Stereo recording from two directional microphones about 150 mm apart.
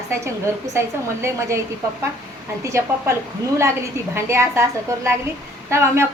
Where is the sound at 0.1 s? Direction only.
20° right (ahead or behind).